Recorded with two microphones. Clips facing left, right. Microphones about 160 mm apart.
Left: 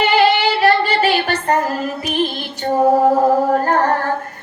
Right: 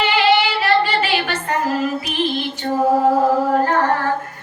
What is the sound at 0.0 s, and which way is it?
Female singing, 45° left (ahead or behind).